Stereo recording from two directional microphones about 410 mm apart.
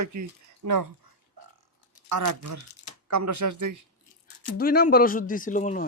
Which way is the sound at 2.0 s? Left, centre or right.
Right.